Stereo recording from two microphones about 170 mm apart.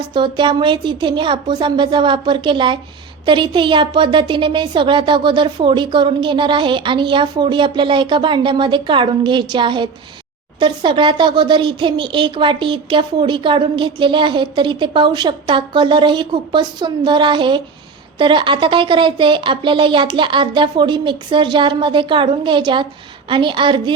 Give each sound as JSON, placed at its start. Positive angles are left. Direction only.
{"t": 0.1, "sound": "speech", "side_deg": -30}